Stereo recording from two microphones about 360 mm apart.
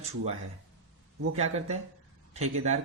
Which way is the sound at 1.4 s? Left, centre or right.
Centre.